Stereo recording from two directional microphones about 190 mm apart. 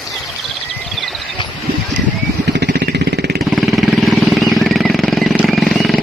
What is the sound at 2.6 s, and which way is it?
Vehicle, 55° right (ahead or behind).